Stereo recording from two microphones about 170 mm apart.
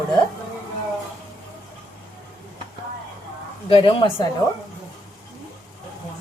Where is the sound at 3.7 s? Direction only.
30° left (ahead or behind).